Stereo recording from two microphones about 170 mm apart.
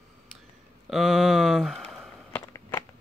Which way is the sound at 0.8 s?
Centre (ahead or behind).